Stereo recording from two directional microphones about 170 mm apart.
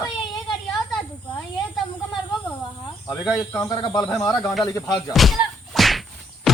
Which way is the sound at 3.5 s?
20° left (ahead or behind).